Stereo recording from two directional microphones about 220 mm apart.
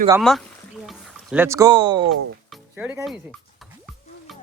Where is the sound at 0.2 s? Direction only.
Centre (ahead or behind); by 2.0 s 20° right (ahead or behind).